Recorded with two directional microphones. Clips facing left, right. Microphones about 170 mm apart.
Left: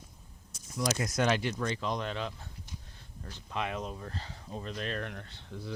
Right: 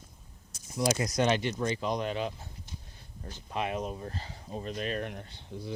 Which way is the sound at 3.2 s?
40° right (ahead or behind).